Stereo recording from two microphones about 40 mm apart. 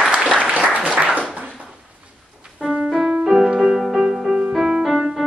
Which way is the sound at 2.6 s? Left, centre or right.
Centre.